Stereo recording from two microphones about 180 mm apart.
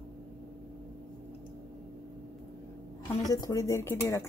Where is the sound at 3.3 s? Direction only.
20° left (ahead or behind).